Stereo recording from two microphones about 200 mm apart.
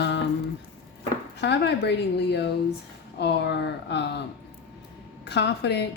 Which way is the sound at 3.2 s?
60° left (ahead or behind).